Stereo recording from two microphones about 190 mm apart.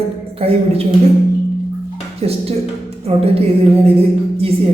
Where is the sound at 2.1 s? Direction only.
30° right (ahead or behind).